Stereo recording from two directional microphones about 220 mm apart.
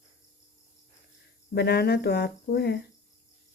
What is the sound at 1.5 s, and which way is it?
Speech, 45° left (ahead or behind).